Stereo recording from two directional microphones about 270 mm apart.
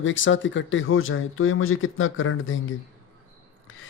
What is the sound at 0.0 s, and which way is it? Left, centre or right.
Speech, left.